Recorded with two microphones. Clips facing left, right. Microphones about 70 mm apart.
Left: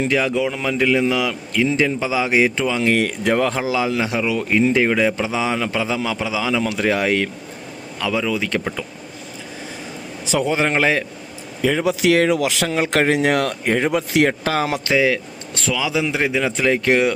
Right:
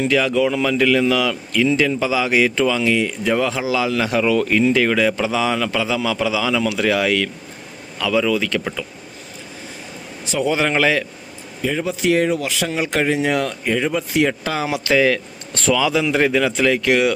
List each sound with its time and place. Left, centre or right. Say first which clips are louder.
0.0 s a man's voice: right 2 dB; left
2.8 s speech: left 1 dB; left
3.3 s a man's voice: even; left
10.4 s a man's voice: right 2 dB; left
11.6 s speech: left 3 dB; left
14.3 s speech: left 2 dB; left
14.9 s a man's voice: right 2 dB; centre
16.4 s a man's voice: right 1 dB; left